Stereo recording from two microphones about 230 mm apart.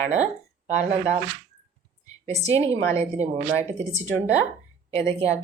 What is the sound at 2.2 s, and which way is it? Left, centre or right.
A woman's voice, right.